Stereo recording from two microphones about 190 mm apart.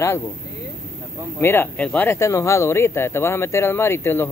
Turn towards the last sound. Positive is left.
turn(degrees=10)  # may be behind; listen again after turning